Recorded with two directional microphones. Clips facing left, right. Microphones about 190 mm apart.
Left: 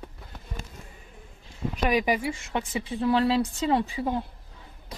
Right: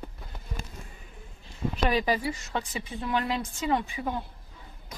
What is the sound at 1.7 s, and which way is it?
A woman's voice, 15° left (ahead or behind).